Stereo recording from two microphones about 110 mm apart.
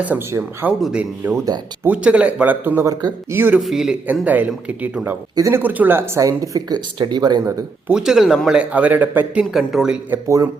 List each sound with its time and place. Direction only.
0.3 s speech: 25° right (ahead or behind)
0.8 s speech: 5° right (ahead or behind); by 3.6 s 20° right (ahead or behind)
3.6 s speech: 5° right (ahead or behind)
4.0 s speech: 15° right (ahead or behind)
5.4 s speech: 25° right (ahead or behind)
5.6 s speech: 15° right (ahead or behind)
6.1 s speech: 30° right (ahead or behind)
7.9 s speech: 5° right (ahead or behind)
10.2 s speech: 25° right (ahead or behind)